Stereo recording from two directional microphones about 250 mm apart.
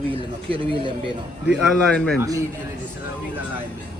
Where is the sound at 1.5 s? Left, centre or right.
Centre.